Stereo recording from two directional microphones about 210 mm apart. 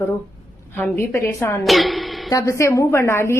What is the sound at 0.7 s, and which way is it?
Speech, 5° left (ahead or behind).